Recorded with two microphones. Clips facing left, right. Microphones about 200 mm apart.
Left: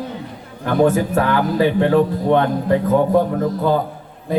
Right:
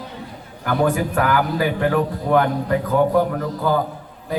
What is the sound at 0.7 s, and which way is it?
Speech, 25° left (ahead or behind).